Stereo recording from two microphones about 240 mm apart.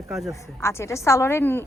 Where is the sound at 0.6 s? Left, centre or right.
Centre.